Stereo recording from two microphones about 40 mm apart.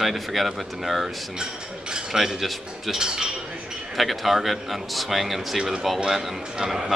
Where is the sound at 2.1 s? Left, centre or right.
Centre.